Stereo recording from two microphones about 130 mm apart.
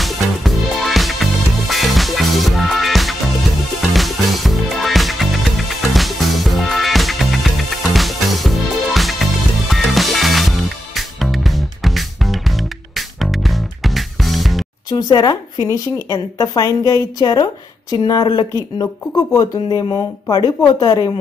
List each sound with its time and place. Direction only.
0.0 s music: centre (ahead or behind)
14.9 s a woman's voice: 30° left (ahead or behind)